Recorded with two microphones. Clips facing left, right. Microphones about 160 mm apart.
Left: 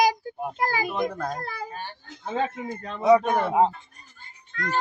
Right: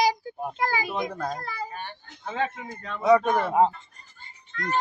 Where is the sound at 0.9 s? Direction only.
Centre (ahead or behind).